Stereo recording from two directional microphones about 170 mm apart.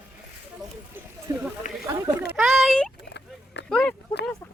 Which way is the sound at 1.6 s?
50° left (ahead or behind).